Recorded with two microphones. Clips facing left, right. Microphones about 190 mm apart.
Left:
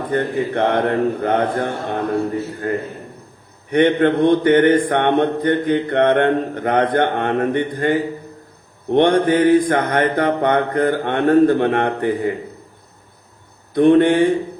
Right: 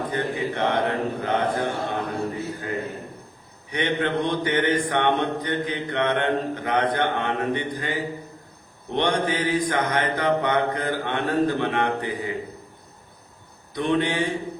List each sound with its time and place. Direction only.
0.1 s mantra: 55° left (ahead or behind)
13.7 s speech: 55° left (ahead or behind)